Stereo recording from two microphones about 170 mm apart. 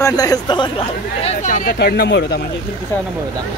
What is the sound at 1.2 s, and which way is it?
Speech, 40° left (ahead or behind).